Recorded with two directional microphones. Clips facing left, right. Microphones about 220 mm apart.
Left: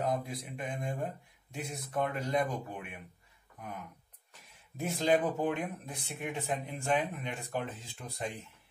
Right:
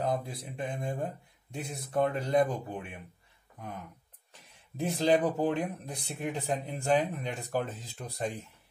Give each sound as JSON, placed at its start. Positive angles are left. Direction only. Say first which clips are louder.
{"t": 0.0, "sound": "mantra", "louder": "right 1 dB", "side_deg": -30}
{"t": 1.5, "sound": "speech", "louder": "right 3 dB", "side_deg": -30}
{"t": 4.7, "sound": "speech", "louder": "right 3 dB", "side_deg": -35}